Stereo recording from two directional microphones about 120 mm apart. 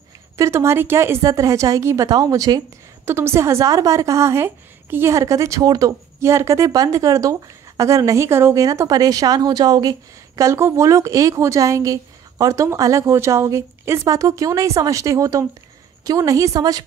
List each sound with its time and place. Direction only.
0.4 s a woman's voice: 25° right (ahead or behind)